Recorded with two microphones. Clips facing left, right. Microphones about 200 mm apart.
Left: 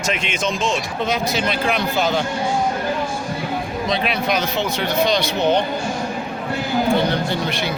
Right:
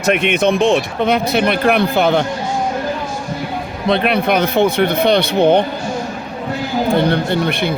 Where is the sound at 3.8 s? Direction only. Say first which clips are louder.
Right 8 dB; 60° right (ahead or behind).